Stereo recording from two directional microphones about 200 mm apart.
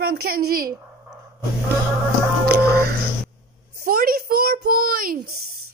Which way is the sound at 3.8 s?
45° right (ahead or behind).